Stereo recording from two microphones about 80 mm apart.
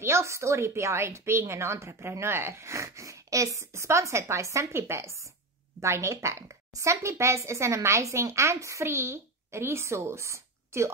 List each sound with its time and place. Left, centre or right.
0.0 s a woman's voice: right